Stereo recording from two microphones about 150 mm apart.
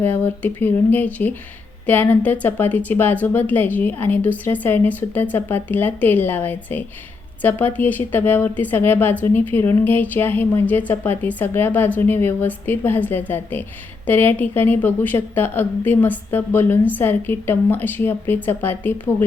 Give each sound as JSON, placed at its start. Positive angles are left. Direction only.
{"t": 0.0, "sound": "speech", "side_deg": 15}